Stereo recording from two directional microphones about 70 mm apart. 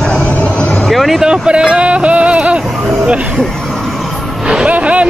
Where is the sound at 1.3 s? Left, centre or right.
Centre.